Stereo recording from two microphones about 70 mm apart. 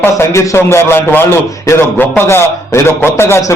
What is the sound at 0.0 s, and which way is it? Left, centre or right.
A man's voice, left.